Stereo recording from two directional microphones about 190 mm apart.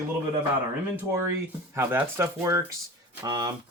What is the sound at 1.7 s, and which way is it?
Speech, 10° right (ahead or behind).